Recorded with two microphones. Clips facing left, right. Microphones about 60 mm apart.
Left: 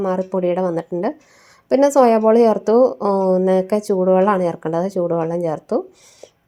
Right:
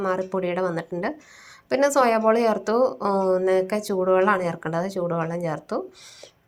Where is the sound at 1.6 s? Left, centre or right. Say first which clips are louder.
Left 7 dB; right.